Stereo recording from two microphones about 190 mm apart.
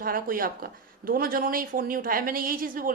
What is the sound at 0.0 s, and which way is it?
Speech, 50° right (ahead or behind).